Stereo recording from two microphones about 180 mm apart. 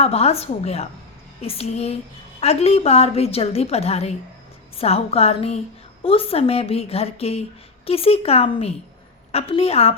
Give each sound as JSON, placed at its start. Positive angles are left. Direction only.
{"t": 0.0, "sound": "a woman's voice", "side_deg": 35}